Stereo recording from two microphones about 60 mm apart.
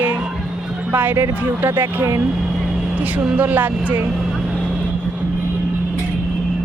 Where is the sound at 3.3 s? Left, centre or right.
Right.